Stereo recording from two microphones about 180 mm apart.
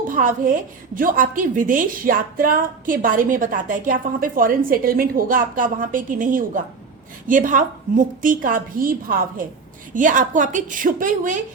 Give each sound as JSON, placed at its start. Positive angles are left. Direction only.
{"t": 0.1, "sound": "a woman's voice", "side_deg": -50}